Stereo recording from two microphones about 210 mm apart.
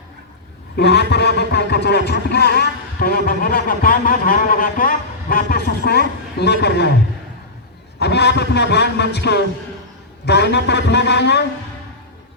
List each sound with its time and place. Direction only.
0.8 s speech: 50° left (ahead or behind)
7.9 s speech: 50° left (ahead or behind)